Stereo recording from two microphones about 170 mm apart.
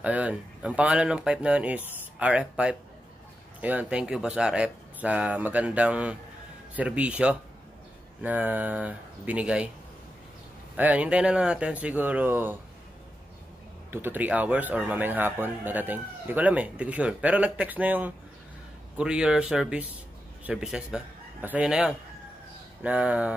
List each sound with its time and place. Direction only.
0.0 s speech: 10° right (ahead or behind)
10.8 s speech: 10° right (ahead or behind)
13.8 s a man's voice: 10° right (ahead or behind)